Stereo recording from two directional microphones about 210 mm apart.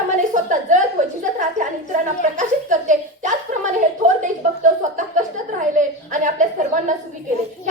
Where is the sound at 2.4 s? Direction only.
35° right (ahead or behind).